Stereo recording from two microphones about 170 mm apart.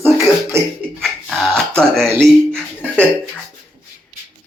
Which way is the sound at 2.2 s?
5° left (ahead or behind).